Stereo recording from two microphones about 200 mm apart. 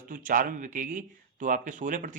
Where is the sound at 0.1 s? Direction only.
40° right (ahead or behind).